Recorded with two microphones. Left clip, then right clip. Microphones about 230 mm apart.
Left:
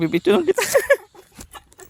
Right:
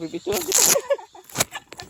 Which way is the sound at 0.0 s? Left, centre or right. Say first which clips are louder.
Left 10 dB; left.